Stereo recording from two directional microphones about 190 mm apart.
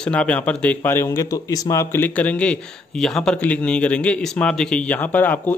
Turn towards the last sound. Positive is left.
turn(degrees=10)  # may be behind; listen again after turning